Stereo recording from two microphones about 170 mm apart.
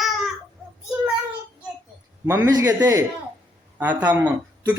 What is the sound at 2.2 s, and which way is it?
A man's voice, 10° right (ahead or behind).